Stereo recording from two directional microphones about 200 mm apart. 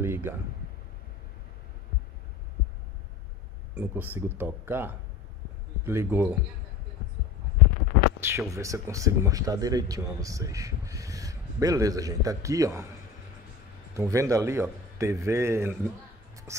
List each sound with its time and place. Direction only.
0.0 s a sound: 10° right (ahead or behind)
3.7 s speech: 10° right (ahead or behind)
8.2 s speech: 10° right (ahead or behind)
13.9 s speech: 15° right (ahead or behind)